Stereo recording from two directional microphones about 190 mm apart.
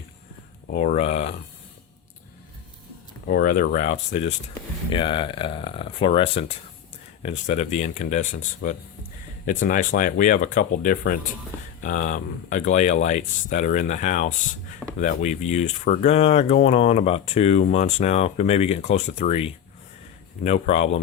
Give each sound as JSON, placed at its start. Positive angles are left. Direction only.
{"t": 0.7, "sound": "speech", "side_deg": 40}
{"t": 3.2, "sound": "speech", "side_deg": 50}